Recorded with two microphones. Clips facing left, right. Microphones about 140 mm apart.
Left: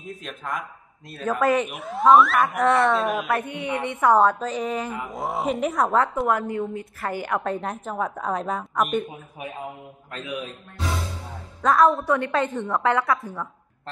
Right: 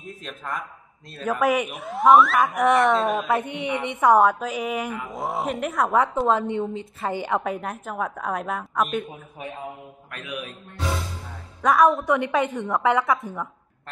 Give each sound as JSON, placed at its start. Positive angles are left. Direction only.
{"t": 0.0, "sound": "a woman's voice", "side_deg": 0}
{"t": 1.4, "sound": "a woman's voice", "side_deg": -10}
{"t": 1.7, "sound": "a woman's voice", "side_deg": 0}
{"t": 2.4, "sound": "a woman's voice", "side_deg": -15}
{"t": 5.0, "sound": "a woman's voice", "side_deg": 0}
{"t": 6.1, "sound": "a woman's voice", "side_deg": -25}
{"t": 7.5, "sound": "a woman's voice", "side_deg": -5}
{"t": 10.1, "sound": "mantra", "side_deg": 25}
{"t": 11.6, "sound": "a woman's voice", "side_deg": -15}